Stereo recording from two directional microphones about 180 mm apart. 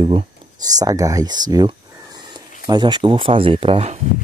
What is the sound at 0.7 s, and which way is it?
Speech, 20° right (ahead or behind).